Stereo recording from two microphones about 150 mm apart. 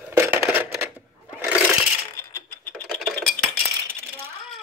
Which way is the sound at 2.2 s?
15° left (ahead or behind).